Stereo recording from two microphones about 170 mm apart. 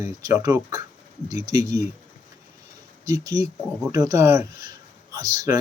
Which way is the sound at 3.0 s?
20° right (ahead or behind).